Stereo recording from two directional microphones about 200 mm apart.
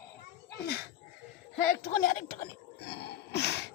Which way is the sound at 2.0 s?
45° left (ahead or behind).